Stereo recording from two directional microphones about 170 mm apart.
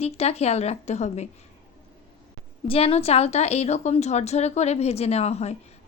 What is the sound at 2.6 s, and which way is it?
A woman's voice, 35° left (ahead or behind).